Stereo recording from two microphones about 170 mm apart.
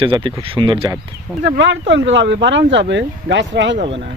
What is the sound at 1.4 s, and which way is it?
Speech, 90° right.